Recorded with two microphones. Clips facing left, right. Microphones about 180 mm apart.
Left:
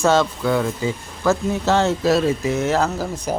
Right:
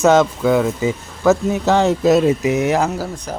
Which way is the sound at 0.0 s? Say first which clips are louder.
Right 4 dB; 20° right (ahead or behind).